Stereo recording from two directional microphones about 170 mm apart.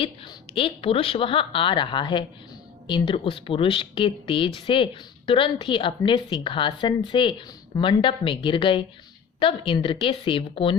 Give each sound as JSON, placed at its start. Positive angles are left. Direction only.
{"t": 0.5, "sound": "a woman's voice", "side_deg": 30}